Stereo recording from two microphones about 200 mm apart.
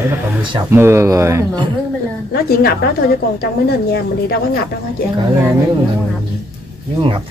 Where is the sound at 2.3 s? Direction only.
50° left (ahead or behind).